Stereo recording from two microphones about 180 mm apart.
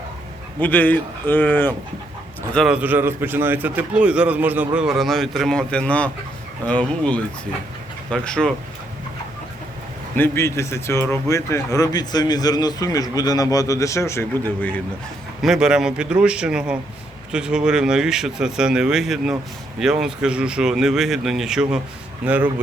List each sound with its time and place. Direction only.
0.6 s speech: 10° left (ahead or behind)
2.7 s a man's voice: 10° right (ahead or behind)
10.2 s speech: 15° left (ahead or behind)
15.4 s a man's voice: 5° right (ahead or behind)